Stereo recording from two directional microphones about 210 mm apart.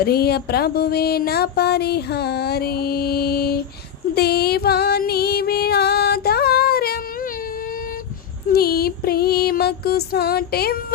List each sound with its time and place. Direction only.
0.0 s a sound: 50° left (ahead or behind)
4.1 s music: 50° left (ahead or behind)
8.5 s music: 45° left (ahead or behind)